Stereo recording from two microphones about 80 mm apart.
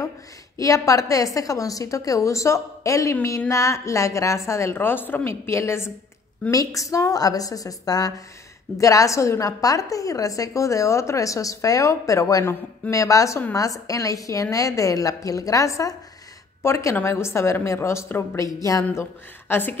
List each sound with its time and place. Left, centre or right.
0.6 s a woman's voice: left
6.5 s a woman's voice: left
18.9 s speech: left